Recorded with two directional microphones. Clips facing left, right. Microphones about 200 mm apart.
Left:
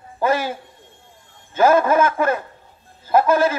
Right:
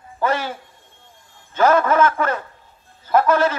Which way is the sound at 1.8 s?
20° left (ahead or behind).